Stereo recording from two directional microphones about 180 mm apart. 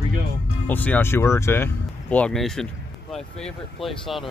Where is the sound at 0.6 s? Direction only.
10° left (ahead or behind).